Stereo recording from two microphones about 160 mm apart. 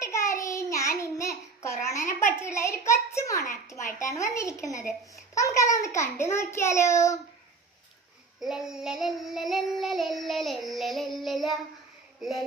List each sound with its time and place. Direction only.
0.0 s child singing: 20° left (ahead or behind)
3.5 s a child's voice: 15° left (ahead or behind)
8.4 s child singing: 5° right (ahead or behind)